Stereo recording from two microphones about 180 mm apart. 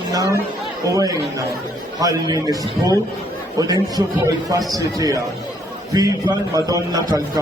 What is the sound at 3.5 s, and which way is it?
A man's voice, 20° right (ahead or behind).